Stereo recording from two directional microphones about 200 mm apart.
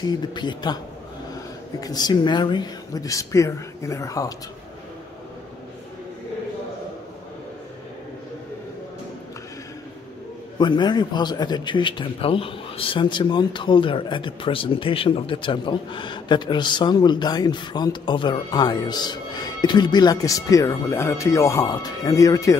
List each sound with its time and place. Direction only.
0.3 s a man's voice: 20° left (ahead or behind)
1.8 s speech: 20° left (ahead or behind)
10.6 s a man's voice: 20° left (ahead or behind)